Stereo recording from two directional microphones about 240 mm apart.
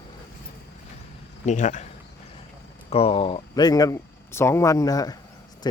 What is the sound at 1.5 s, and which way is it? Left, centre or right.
Speech, left.